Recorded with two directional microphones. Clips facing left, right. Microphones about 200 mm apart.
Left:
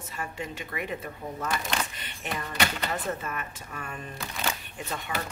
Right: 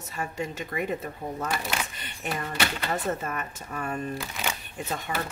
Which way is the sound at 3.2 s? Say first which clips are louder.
Right 3 dB; 45° right (ahead or behind).